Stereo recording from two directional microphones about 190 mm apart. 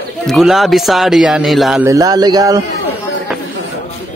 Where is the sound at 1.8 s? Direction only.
20° right (ahead or behind).